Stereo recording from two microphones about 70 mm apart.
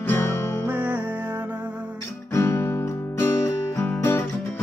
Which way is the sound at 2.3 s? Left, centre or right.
Left.